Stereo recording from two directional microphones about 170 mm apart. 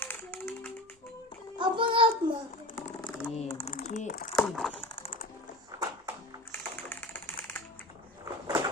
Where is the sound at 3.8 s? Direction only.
65° left (ahead or behind).